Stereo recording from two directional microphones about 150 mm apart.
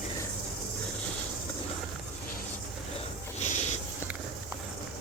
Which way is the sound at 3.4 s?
50° left (ahead or behind).